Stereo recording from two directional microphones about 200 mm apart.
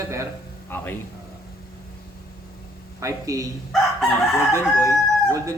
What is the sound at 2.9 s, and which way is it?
Speech, 15° right (ahead or behind).